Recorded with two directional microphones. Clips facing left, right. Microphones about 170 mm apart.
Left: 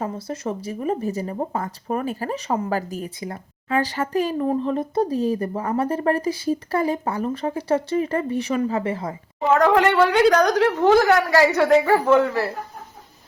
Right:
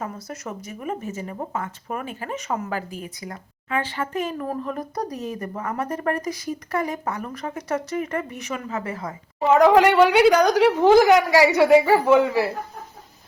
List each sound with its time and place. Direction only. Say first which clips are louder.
0.0 s speech: left 5 dB; 30° left (ahead or behind)
9.5 s a woman's voice: right 2 dB; 10° right (ahead or behind)